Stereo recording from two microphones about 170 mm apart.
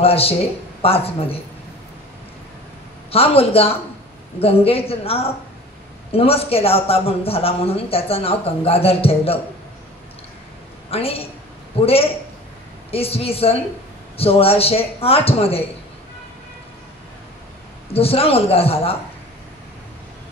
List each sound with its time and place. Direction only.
0.0 s speech: 35° left (ahead or behind)
3.1 s speech: 35° left (ahead or behind)
10.9 s speech: 35° left (ahead or behind)
17.9 s speech: 35° left (ahead or behind)